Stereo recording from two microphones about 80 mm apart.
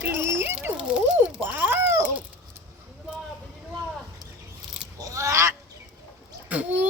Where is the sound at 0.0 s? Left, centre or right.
Right.